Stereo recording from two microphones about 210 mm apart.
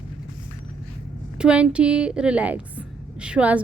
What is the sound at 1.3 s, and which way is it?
A woman's voice, 5° right (ahead or behind).